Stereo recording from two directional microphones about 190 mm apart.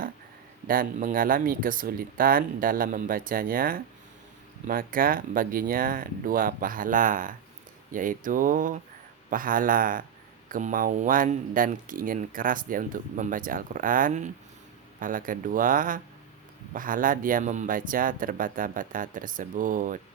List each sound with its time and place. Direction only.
0.7 s speech: 50° right (ahead or behind)